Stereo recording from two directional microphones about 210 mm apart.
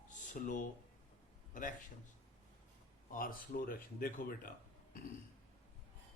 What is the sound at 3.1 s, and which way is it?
Speech, 40° left (ahead or behind).